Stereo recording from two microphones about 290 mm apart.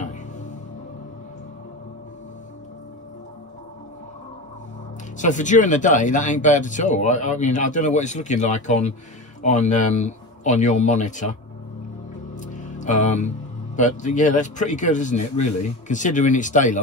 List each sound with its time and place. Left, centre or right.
5.2 s speech: left
12.4 s music: left
13.7 s speech: left